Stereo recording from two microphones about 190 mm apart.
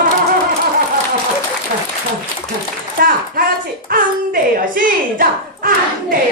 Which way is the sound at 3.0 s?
50° right (ahead or behind).